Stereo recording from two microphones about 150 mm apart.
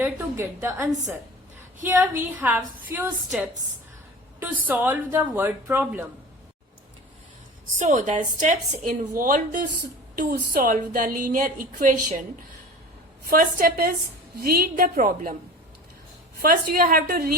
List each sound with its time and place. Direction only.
0.0 s a woman's voice: 15° right (ahead or behind)
4.4 s speech: 10° right (ahead or behind)
7.8 s a woman's voice: 55° right (ahead or behind)
9.1 s a woman's voice: 65° right (ahead or behind)
13.2 s a woman's voice: 70° right (ahead or behind)
16.4 s a woman's voice: 70° right (ahead or behind)